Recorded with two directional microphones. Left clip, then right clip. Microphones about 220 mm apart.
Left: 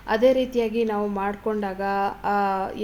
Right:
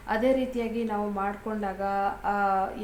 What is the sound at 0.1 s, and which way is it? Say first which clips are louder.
A woman's voice: left 6 dB; 35° left (ahead or behind).